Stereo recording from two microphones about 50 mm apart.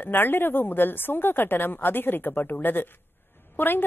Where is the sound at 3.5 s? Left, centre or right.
Left.